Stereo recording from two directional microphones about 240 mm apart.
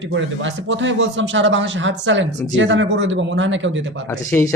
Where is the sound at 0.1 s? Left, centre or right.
Right.